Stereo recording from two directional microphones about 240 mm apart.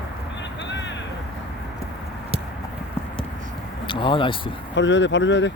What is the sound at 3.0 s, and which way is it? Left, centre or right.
Clip-clop, centre.